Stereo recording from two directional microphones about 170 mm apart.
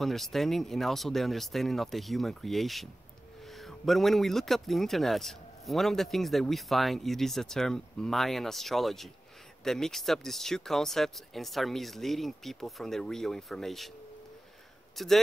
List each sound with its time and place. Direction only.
0.0 s speech: centre (ahead or behind)
15.0 s speech: centre (ahead or behind)